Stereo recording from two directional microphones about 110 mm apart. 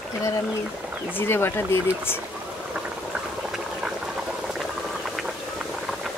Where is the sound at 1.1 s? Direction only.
20° left (ahead or behind).